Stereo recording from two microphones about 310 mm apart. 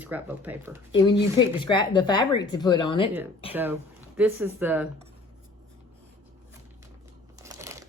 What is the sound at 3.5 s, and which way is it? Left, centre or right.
Speech, centre.